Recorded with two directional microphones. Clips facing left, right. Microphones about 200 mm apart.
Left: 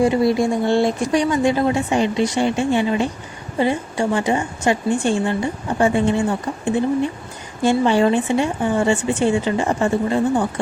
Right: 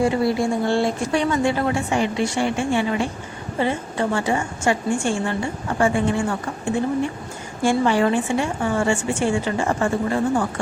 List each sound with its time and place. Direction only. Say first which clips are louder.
0.0 s a woman's voice: left 3 dB; 15° left (ahead or behind)